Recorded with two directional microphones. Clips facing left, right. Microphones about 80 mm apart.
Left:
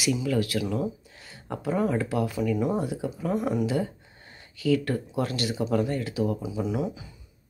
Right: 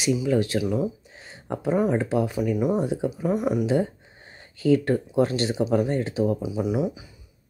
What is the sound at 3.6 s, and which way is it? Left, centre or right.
Speech, right.